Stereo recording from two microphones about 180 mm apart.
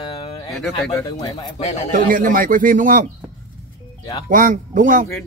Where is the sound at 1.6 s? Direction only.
40° left (ahead or behind).